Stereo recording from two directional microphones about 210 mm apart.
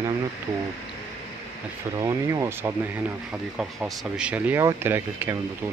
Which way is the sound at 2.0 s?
15° right (ahead or behind).